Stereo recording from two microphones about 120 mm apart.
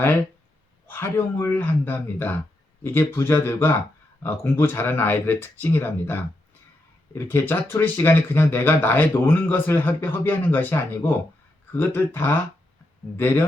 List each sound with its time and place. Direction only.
0.9 s speech: 20° left (ahead or behind)